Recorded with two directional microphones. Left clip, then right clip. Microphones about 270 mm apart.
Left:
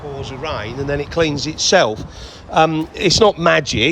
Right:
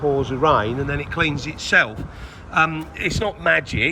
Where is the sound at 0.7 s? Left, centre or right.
Centre.